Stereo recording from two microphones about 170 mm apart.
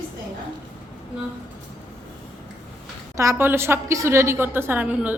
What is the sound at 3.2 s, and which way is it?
A woman's voice, 15° right (ahead or behind).